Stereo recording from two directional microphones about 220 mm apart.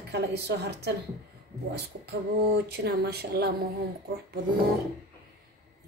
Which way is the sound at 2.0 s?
45° right (ahead or behind).